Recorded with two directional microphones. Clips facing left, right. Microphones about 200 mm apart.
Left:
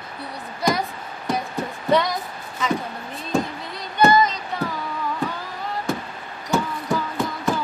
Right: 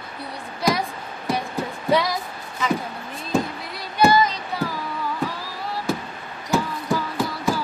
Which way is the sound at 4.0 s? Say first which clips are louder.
Left 1 dB; 5° right (ahead or behind).